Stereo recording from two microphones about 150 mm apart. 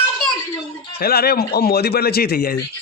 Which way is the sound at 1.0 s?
90° left.